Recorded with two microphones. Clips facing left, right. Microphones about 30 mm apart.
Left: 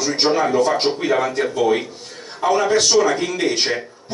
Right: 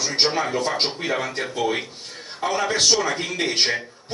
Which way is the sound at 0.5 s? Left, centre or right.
Right.